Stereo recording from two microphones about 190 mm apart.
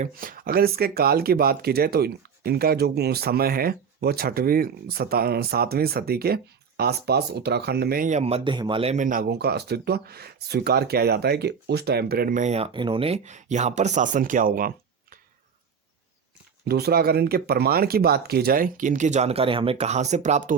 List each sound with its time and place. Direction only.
0.0 s speech: 50° right (ahead or behind)
16.6 s speech: 55° right (ahead or behind); by 20.6 s 40° right (ahead or behind)